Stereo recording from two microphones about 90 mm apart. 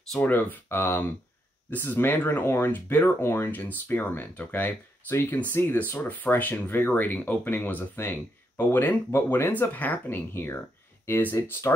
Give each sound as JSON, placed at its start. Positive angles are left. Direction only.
{"t": 0.3, "sound": "speech", "side_deg": 20}